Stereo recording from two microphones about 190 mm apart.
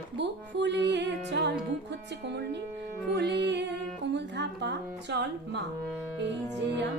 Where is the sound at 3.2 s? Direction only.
65° right (ahead or behind).